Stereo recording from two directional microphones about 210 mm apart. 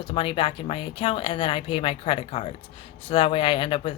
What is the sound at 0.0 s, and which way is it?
Speech, 25° left (ahead or behind).